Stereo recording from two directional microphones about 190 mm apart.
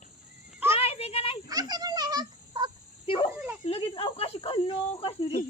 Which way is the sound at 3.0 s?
30° left (ahead or behind).